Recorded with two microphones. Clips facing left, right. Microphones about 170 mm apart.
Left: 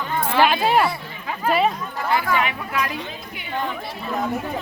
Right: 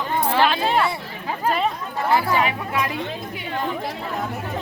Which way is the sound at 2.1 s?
35° right (ahead or behind).